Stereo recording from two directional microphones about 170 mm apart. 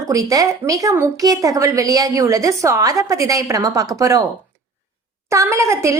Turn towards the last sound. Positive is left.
turn(degrees=-15)  # may be behind; listen again after turning